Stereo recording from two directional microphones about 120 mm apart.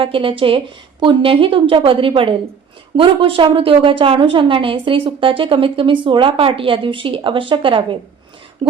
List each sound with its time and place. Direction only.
0.0 s a woman's voice: 45° right (ahead or behind)